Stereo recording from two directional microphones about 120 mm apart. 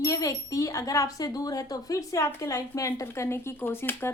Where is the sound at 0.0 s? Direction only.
30° left (ahead or behind).